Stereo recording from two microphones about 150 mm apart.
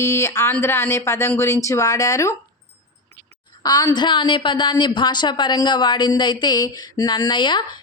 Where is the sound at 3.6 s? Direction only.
25° left (ahead or behind).